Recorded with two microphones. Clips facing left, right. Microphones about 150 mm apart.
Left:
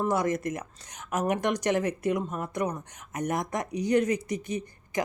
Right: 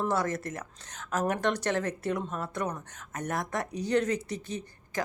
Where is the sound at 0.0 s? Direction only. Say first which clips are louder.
Left 3 dB; 15° left (ahead or behind).